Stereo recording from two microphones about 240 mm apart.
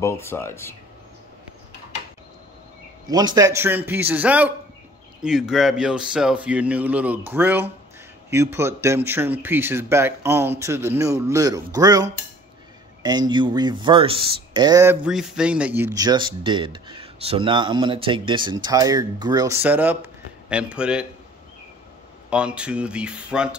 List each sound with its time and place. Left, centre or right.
0.0 s speech: centre
3.1 s speech: centre
22.3 s speech: centre